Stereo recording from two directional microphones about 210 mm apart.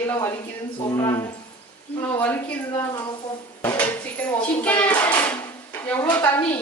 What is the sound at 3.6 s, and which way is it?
Dishes, 10° left (ahead or behind).